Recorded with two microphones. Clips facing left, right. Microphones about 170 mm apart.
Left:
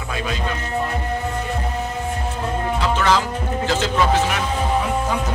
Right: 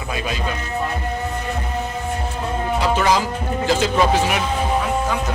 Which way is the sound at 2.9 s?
10° right (ahead or behind).